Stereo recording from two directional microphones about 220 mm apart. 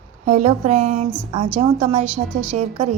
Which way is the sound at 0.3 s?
30° right (ahead or behind).